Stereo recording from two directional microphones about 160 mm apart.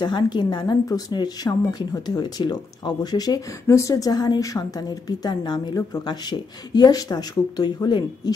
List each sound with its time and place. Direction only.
0.0 s speech: 30° left (ahead or behind)